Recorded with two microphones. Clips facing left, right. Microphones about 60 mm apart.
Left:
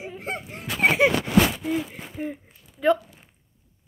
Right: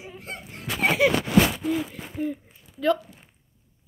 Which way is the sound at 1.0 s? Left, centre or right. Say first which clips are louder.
Even; left.